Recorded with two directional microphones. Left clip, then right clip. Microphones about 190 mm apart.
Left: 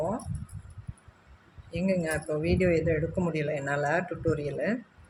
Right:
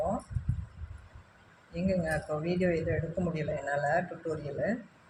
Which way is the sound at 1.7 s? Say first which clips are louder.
Left 2 dB; 45° left (ahead or behind).